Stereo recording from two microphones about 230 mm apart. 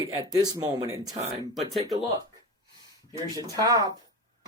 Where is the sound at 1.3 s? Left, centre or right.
Centre.